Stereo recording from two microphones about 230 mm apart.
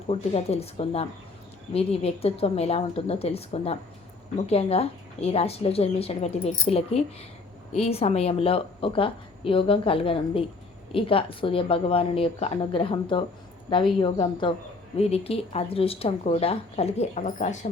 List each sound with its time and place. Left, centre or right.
0.1 s speech: left